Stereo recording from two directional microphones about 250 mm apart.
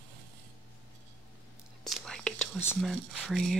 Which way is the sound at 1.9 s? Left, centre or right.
Centre.